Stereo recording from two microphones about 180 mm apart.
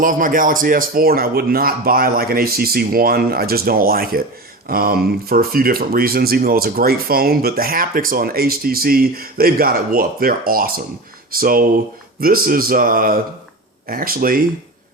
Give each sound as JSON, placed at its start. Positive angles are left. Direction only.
{"t": 0.0, "sound": "speech", "side_deg": -50}